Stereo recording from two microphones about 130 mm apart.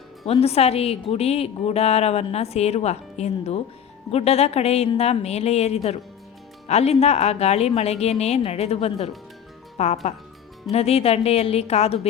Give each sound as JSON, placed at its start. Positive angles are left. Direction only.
{"t": 0.3, "sound": "a woman's voice", "side_deg": 50}